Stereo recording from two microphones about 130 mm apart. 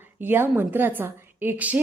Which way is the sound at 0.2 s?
15° right (ahead or behind).